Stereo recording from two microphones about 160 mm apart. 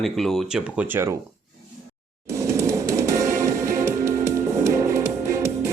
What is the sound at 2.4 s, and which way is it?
Music, 20° right (ahead or behind).